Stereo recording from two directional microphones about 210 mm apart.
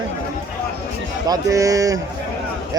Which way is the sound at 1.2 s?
15° right (ahead or behind).